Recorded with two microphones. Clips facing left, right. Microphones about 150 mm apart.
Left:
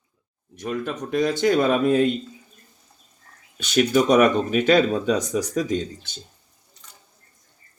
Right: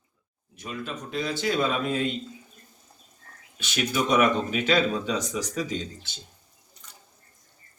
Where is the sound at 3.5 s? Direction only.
45° left (ahead or behind).